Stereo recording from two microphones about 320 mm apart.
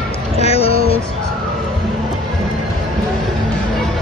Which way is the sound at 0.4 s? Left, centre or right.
Centre.